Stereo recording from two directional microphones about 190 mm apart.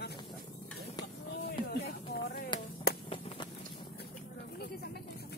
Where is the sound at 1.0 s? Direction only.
60° left (ahead or behind).